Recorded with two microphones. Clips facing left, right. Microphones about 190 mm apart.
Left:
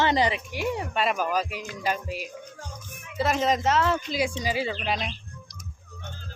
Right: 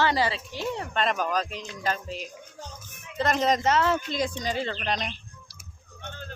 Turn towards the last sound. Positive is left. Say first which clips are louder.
# left 1 dB
turn(degrees=5)  # may be behind; listen again after turning